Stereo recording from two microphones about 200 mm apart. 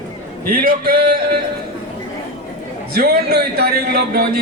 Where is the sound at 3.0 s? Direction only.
50° right (ahead or behind).